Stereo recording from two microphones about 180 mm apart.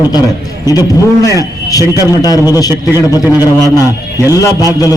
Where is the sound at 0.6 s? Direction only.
20° left (ahead or behind).